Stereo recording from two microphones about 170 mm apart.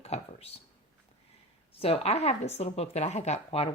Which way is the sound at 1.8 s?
35° left (ahead or behind).